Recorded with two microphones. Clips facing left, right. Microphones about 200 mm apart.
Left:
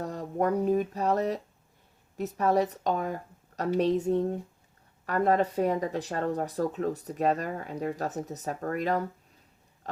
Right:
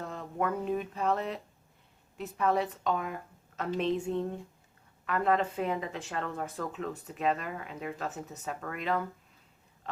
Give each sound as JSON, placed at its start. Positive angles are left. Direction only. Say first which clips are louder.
{"t": 0.0, "sound": "speech", "louder": "left 5 dB", "side_deg": 40}